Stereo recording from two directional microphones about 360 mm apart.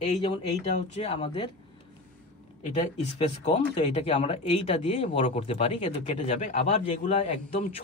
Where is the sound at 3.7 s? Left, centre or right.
Centre.